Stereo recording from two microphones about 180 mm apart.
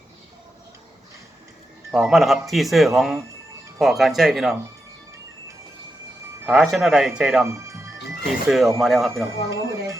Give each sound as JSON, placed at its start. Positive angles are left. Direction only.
{"t": 1.9, "sound": "speech", "side_deg": 0}
{"t": 6.5, "sound": "speech", "side_deg": 0}
{"t": 7.4, "sound": "music", "side_deg": -15}
{"t": 8.3, "sound": "speech", "side_deg": 0}
{"t": 9.2, "sound": "speech", "side_deg": -15}